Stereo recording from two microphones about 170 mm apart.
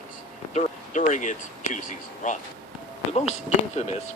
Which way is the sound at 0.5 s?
45° left (ahead or behind).